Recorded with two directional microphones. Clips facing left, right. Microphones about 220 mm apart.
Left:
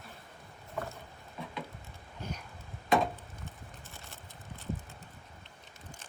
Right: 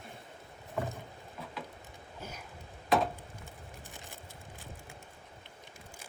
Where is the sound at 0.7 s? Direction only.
15° right (ahead or behind).